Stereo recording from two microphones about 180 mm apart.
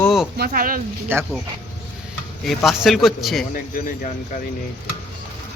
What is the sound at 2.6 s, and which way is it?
Speech, centre (ahead or behind).